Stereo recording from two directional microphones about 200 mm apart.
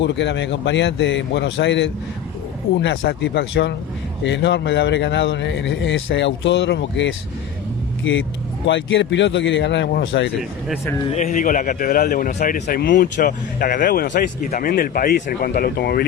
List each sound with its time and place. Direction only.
0.0 s speech: 60° left (ahead or behind)
8.6 s speech: 65° left (ahead or behind)
11.0 s speech: 35° left (ahead or behind); by 16.0 s 50° left (ahead or behind)